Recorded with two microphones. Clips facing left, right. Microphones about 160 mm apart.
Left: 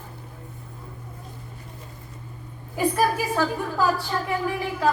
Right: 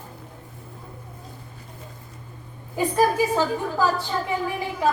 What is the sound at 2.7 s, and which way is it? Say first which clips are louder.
A woman's voice: right 2 dB; 20° right (ahead or behind).